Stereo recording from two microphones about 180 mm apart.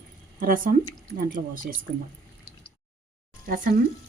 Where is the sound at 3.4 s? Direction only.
50° right (ahead or behind).